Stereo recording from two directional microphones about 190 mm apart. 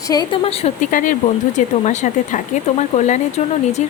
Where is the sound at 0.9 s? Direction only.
40° left (ahead or behind).